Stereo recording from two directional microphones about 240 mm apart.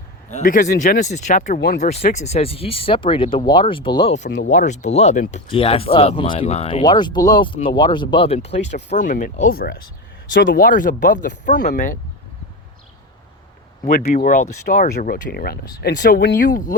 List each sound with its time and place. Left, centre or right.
0.3 s speech: left
13.8 s speech: left